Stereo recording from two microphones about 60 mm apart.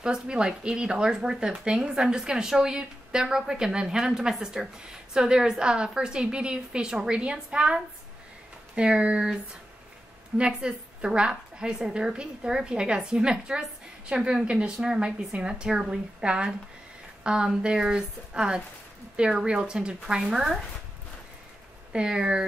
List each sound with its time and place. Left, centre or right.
0.0 s speech: centre
10.3 s speech: centre
21.9 s speech: centre